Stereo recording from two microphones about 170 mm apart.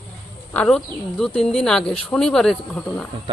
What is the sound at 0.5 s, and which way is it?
Speech, 10° left (ahead or behind).